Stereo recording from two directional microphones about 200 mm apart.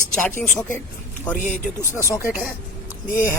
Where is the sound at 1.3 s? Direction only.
40° left (ahead or behind).